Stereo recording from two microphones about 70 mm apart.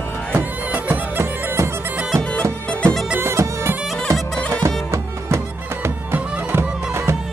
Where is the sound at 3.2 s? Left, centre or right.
Right.